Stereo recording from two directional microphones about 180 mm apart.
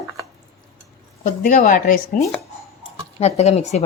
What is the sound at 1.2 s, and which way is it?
Speech, 45° left (ahead or behind).